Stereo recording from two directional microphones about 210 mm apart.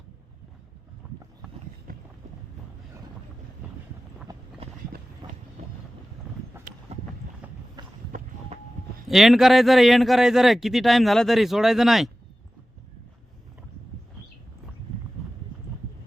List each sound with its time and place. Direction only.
1.0 s boat: 10° right (ahead or behind)
1.9 s boat: 40° right (ahead or behind)
3.6 s vehicle: 5° right (ahead or behind)
4.6 s run: 30° right (ahead or behind)
6.9 s clip-clop: 30° right (ahead or behind)
7.8 s run: 20° right (ahead or behind)
9.0 s a man's voice: centre (ahead or behind)